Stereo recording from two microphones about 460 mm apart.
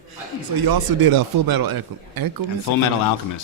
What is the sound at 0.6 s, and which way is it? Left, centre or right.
Speech, right.